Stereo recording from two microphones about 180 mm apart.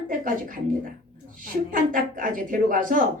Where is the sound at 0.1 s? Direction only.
50° right (ahead or behind).